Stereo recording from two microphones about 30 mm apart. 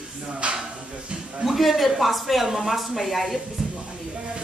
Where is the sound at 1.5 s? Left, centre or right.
Centre.